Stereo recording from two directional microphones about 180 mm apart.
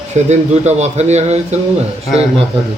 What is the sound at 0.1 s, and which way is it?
A man's voice, 40° right (ahead or behind).